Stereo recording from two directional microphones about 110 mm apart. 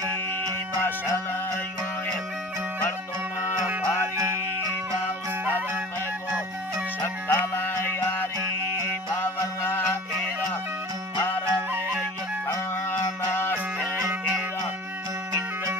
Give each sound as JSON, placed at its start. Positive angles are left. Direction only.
{"t": 0.8, "sound": "music", "side_deg": 20}
{"t": 7.0, "sound": "music", "side_deg": 20}
{"t": 9.2, "sound": "music", "side_deg": 20}
{"t": 13.0, "sound": "music", "side_deg": 20}